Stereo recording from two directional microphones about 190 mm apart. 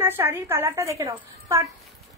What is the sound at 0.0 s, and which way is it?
A woman's voice, 10° right (ahead or behind).